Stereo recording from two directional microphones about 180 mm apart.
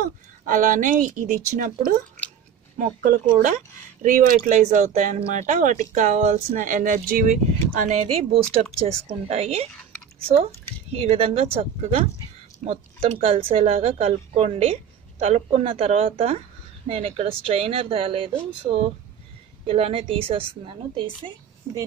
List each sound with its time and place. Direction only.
0.5 s speech: 45° right (ahead or behind)
2.8 s a woman's voice: 45° right (ahead or behind)
10.9 s a woman's voice: 35° right (ahead or behind)